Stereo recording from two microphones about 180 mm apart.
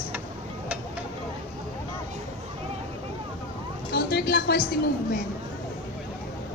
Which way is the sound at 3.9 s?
65° left (ahead or behind).